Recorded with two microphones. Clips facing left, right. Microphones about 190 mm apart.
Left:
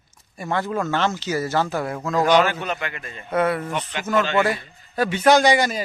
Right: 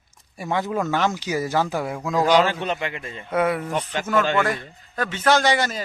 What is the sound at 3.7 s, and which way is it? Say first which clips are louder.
Speech: right 2 dB; 35° right (ahead or behind).